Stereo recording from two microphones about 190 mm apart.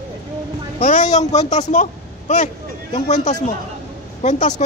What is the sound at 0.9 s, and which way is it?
Speech, 35° left (ahead or behind).